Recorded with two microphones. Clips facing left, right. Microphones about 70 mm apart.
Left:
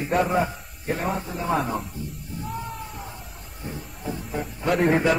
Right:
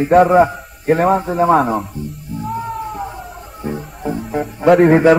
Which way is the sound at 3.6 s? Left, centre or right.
Right.